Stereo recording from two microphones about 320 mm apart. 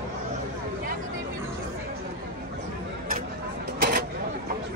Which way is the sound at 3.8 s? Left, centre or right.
Right.